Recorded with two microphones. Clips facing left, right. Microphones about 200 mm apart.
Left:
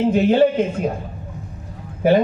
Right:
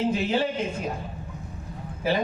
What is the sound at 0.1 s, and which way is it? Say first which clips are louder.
Speech: left 10 dB; 55° left (ahead or behind).